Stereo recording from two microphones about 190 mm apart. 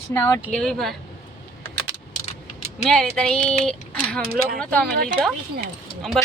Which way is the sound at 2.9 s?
5° left (ahead or behind).